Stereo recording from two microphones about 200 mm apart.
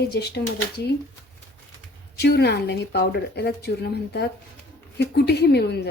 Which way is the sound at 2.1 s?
55° left (ahead or behind).